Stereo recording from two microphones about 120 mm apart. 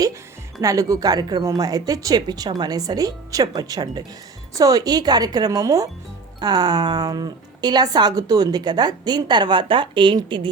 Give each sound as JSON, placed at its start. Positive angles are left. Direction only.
{"t": 0.6, "sound": "speech", "side_deg": -25}